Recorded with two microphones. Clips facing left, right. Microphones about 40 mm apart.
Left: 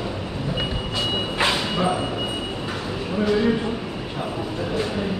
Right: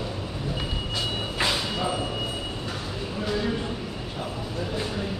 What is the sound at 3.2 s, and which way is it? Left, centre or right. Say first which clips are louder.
Speech: left 8 dB; left.